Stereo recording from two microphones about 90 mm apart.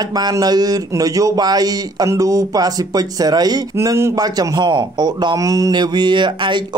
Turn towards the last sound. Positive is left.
turn(degrees=-60)  # may be behind; listen again after turning